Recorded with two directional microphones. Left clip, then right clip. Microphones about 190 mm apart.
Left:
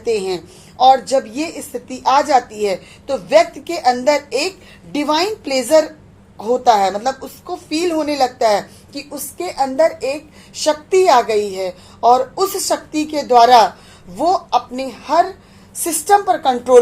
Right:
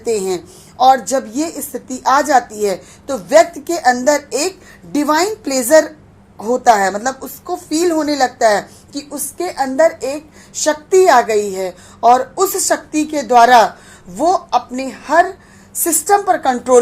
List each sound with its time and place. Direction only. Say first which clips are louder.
0.0 s a woman's voice: right 1 dB; 30° right (ahead or behind)